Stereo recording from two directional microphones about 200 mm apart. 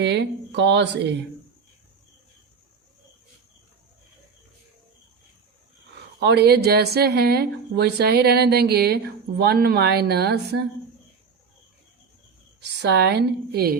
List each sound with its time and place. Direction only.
0.0 s a woman's voice: 60° right (ahead or behind)
6.1 s speech: 55° right (ahead or behind)
12.5 s a woman's voice: 55° right (ahead or behind)